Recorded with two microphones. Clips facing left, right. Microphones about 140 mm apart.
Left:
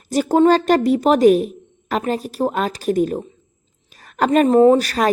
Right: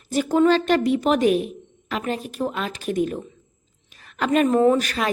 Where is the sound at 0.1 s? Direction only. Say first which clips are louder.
Left 4 dB; 40° left (ahead or behind).